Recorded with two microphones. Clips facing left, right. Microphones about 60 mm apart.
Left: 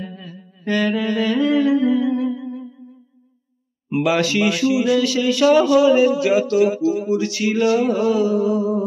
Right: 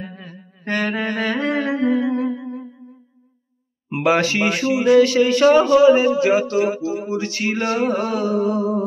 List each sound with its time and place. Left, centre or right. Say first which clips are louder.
0.0 s mantra: left 2 dB; right
3.9 s speech: even; right